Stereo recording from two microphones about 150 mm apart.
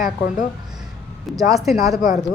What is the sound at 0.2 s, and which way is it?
Speech, 60° left (ahead or behind).